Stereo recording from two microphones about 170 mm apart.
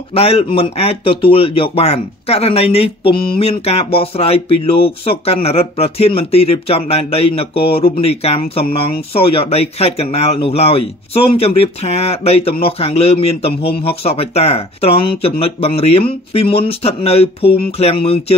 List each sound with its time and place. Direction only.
0.1 s speech: 35° left (ahead or behind)